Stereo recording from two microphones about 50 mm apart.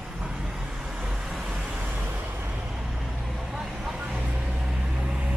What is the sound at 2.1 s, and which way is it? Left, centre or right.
Vehicle, right.